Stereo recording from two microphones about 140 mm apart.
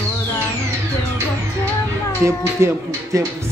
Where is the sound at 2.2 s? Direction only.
20° right (ahead or behind).